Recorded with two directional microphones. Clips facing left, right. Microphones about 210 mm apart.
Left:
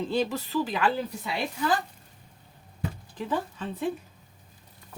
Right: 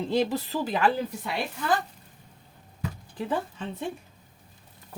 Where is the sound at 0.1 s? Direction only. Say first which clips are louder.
Right 4 dB; 40° right (ahead or behind).